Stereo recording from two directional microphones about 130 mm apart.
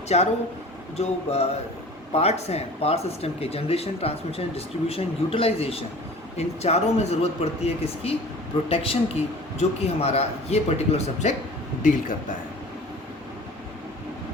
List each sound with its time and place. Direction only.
0.1 s a man's voice: 60° left (ahead or behind)
11.8 s a man's voice: 80° left